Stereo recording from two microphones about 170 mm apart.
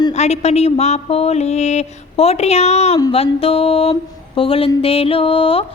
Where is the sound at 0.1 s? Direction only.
40° left (ahead or behind).